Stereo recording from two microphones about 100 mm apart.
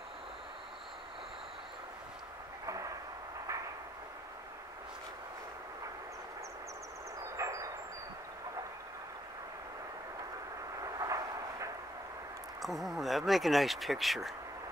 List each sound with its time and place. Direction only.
2.6 s vehicle: 35° right (ahead or behind)
7.3 s vehicle: 35° right (ahead or behind)
10.8 s vehicle: 35° right (ahead or behind)
12.6 s speech: centre (ahead or behind)